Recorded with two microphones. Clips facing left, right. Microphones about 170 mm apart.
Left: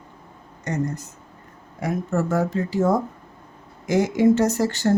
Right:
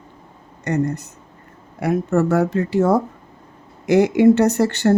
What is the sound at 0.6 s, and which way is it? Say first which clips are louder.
Speech: right 5 dB; 65° right (ahead or behind).